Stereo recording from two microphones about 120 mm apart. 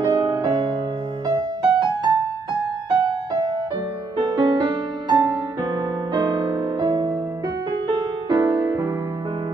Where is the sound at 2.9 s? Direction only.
40° right (ahead or behind).